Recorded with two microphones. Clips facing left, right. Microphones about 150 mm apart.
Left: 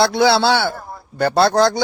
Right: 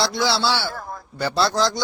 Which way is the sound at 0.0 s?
60° left (ahead or behind).